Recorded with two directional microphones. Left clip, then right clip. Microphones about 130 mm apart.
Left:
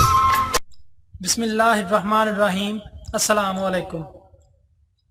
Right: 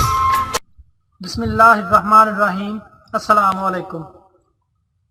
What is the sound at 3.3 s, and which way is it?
Speech, 40° left (ahead or behind).